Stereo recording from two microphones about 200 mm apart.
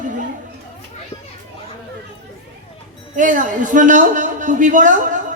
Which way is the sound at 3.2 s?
40° right (ahead or behind).